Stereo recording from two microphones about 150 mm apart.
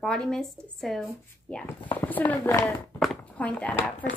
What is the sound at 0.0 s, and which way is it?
A woman's voice, 5° left (ahead or behind).